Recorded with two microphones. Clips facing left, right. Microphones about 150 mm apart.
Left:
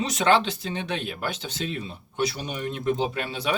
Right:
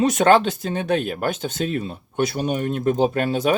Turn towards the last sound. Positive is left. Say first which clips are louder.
# right 8 dB
turn(degrees=-45)  # may be behind; listen again after turning